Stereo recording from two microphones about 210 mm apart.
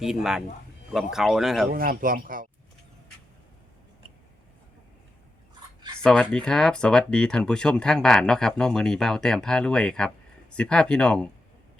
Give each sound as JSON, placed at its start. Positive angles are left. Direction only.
{"t": 0.0, "sound": "speech", "side_deg": 0}
{"t": 1.7, "sound": "speech", "side_deg": -45}
{"t": 6.0, "sound": "speech", "side_deg": 5}